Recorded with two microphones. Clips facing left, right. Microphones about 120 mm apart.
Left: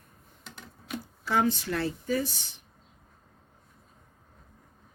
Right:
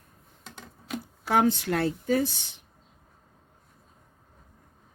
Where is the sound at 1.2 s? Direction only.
70° right (ahead or behind).